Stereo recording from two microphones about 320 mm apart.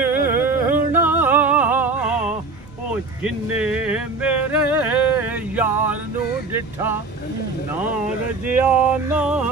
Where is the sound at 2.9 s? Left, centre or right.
Centre.